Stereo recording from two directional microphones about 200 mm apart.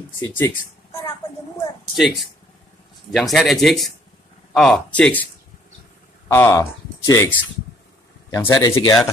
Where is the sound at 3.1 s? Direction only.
Centre (ahead or behind).